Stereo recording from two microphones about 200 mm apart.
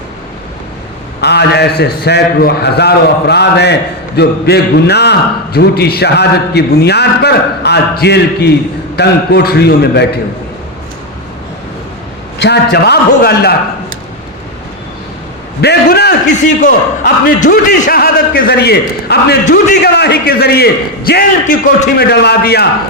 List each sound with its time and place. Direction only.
1.2 s a man's voice: 55° left (ahead or behind)
12.4 s a man's voice: 55° left (ahead or behind)
15.6 s a man's voice: 55° left (ahead or behind)
16.3 s a man's voice: 40° left (ahead or behind)